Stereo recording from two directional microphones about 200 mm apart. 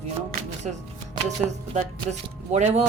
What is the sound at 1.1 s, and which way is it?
Speech, 35° right (ahead or behind).